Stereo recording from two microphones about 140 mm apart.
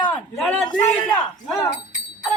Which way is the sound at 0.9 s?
10° left (ahead or behind).